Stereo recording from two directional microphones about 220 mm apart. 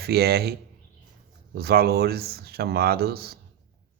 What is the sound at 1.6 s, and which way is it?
Speech, 45° right (ahead or behind).